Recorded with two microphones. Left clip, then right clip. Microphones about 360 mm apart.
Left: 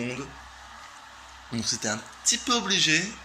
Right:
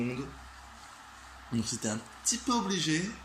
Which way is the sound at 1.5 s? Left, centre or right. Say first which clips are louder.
Left 6 dB; centre.